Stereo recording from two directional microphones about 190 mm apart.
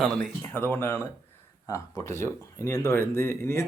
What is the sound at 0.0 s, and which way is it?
Speech, 5° left (ahead or behind).